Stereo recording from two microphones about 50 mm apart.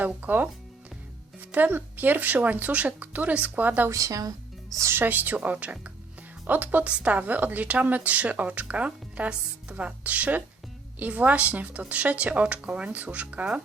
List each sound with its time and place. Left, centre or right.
0.0 s speech: right
3.8 s a woman's voice: right
4.9 s a woman's voice: right